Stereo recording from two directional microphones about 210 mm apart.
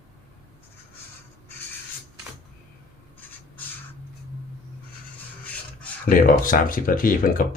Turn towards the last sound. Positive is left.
turn(degrees=40)  # may be behind; listen again after turning